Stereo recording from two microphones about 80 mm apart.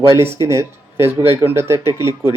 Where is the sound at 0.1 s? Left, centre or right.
Right.